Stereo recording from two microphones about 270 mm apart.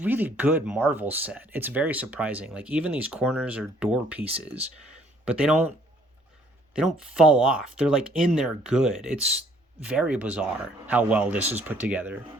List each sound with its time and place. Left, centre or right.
0.0 s speech: centre
6.7 s speech: centre